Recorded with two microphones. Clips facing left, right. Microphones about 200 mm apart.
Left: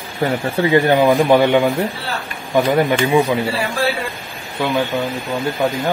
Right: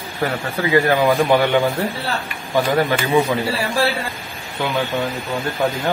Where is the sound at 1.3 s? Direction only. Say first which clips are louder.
Left 3 dB; 15° left (ahead or behind).